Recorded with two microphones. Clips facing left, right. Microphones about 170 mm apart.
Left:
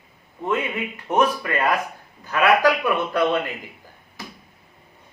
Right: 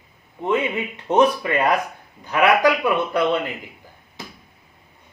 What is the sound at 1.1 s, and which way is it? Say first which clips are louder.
Speech: right 3 dB; 20° right (ahead or behind).